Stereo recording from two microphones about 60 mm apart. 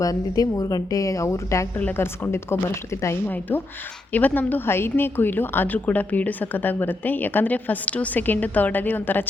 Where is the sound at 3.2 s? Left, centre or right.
Left.